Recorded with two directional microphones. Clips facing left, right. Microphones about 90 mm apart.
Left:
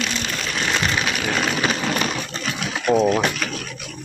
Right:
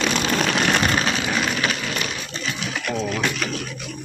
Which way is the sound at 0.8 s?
35° right (ahead or behind).